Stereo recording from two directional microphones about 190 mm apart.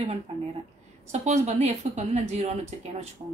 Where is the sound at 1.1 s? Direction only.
35° right (ahead or behind).